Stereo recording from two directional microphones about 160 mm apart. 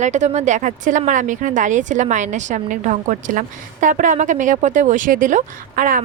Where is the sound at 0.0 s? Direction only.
50° right (ahead or behind).